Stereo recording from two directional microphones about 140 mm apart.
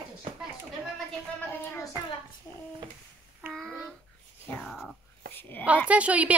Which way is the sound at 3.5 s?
Centre (ahead or behind).